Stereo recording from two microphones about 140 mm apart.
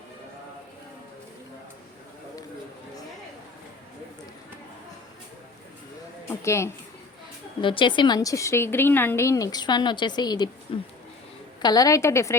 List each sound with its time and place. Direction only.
6.2 s a woman's voice: 20° left (ahead or behind)
7.6 s a woman's voice: 35° left (ahead or behind)
11.6 s a woman's voice: 25° left (ahead or behind)